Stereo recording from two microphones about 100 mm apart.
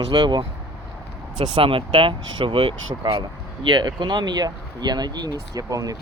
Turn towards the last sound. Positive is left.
turn(degrees=-35)  # may be behind; listen again after turning